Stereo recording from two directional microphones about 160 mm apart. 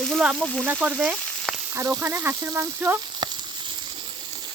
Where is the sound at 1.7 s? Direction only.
20° right (ahead or behind).